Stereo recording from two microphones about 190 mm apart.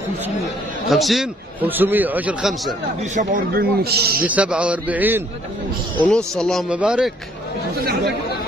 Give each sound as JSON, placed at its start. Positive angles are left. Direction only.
{"t": 0.8, "sound": "a man's voice", "side_deg": 0}
{"t": 3.0, "sound": "a man's voice", "side_deg": -45}
{"t": 4.3, "sound": "a man's voice", "side_deg": -5}
{"t": 5.9, "sound": "speech", "side_deg": 5}
{"t": 7.7, "sound": "a man's voice", "side_deg": -55}